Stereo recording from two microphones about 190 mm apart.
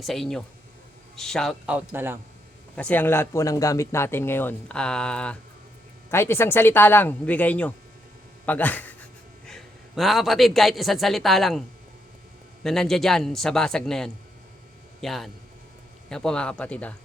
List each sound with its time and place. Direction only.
0.0 s a man's voice: centre (ahead or behind)
2.7 s a man's voice: 10° left (ahead or behind)
12.6 s a man's voice: centre (ahead or behind)